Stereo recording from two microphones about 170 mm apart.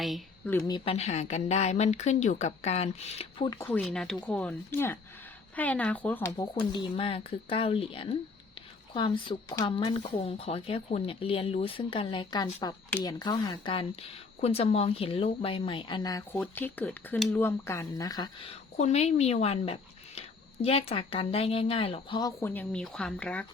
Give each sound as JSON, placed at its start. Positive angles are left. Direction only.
{"t": 0.0, "sound": "a sound", "side_deg": 0}
{"t": 0.7, "sound": "speech", "side_deg": 35}
{"t": 3.6, "sound": "speech", "side_deg": 10}
{"t": 6.3, "sound": "speech", "side_deg": 25}
{"t": 16.4, "sound": "speech", "side_deg": 10}
{"t": 18.4, "sound": "speech", "side_deg": 40}
{"t": 22.4, "sound": "speech", "side_deg": 10}